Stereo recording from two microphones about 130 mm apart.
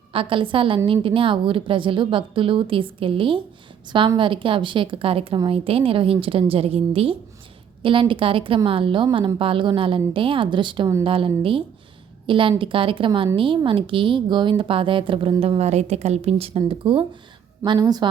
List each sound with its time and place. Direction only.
0.1 s a woman's voice: 45° right (ahead or behind)
17.7 s a woman's voice: 30° right (ahead or behind)